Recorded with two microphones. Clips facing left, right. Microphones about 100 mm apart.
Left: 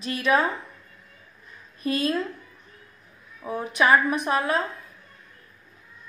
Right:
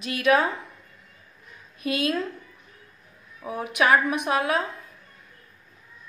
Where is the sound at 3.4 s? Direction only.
5° right (ahead or behind).